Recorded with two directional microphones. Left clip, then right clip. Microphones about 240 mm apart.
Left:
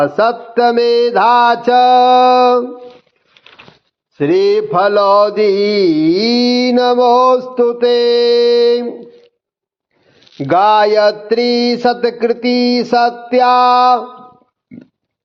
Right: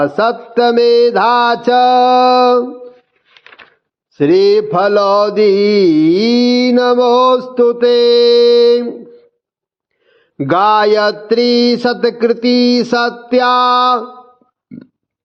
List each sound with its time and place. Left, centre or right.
0.0 s mantra: right
4.1 s mantra: right
10.3 s mantra: right